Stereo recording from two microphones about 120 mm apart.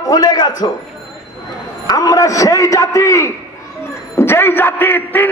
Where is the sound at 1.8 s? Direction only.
30° left (ahead or behind).